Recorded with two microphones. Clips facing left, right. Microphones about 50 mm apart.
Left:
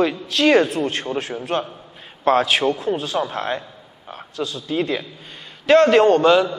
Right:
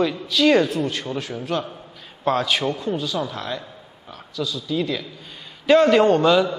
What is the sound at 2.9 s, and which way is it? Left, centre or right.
A man's voice, left.